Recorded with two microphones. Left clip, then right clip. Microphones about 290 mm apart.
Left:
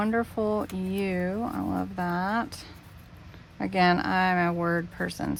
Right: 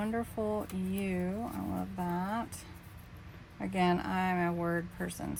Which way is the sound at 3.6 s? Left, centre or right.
Left.